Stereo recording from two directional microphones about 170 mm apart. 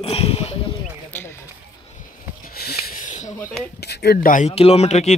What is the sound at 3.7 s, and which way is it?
Speech, 75° left (ahead or behind).